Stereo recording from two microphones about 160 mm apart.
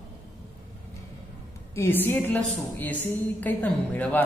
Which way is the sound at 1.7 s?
15° left (ahead or behind).